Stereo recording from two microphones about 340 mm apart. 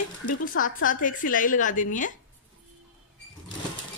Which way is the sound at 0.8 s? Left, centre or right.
Left.